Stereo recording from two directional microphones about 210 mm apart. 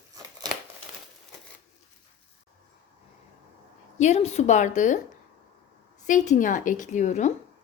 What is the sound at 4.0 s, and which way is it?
A woman's voice, 30° left (ahead or behind).